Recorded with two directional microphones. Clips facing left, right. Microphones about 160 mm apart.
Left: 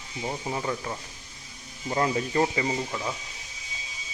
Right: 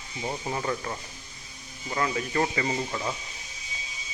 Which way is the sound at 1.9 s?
30° left (ahead or behind).